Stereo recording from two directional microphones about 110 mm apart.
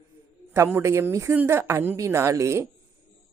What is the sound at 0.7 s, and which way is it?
Speech, 20° right (ahead or behind).